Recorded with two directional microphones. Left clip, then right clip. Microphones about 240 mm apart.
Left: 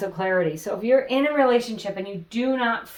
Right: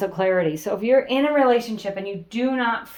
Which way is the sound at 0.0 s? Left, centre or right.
Right.